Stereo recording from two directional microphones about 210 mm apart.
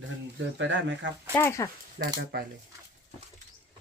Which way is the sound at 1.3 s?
15° left (ahead or behind).